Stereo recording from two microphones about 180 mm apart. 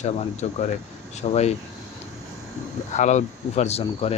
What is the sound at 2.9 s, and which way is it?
Speech, 40° left (ahead or behind).